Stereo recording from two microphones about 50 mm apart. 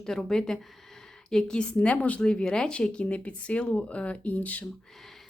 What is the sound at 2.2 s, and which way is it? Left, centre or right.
A woman's voice, centre.